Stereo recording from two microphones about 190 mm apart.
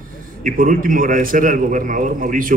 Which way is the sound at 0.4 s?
45° right (ahead or behind).